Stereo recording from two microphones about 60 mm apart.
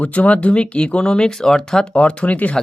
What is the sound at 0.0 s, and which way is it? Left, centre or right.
Speech, left.